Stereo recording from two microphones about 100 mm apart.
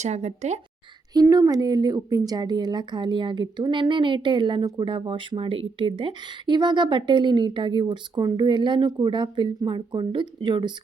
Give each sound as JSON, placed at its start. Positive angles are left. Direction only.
{"t": 1.1, "sound": "a woman's voice", "side_deg": -40}